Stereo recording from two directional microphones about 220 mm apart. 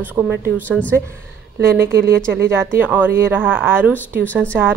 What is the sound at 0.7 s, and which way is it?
Speech, 5° left (ahead or behind).